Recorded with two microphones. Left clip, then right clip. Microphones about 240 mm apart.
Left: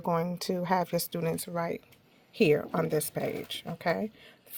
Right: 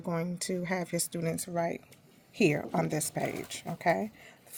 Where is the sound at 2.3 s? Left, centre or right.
Left.